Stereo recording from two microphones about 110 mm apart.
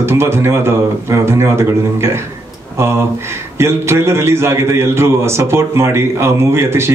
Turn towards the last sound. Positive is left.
turn(degrees=-25)  # may be behind; listen again after turning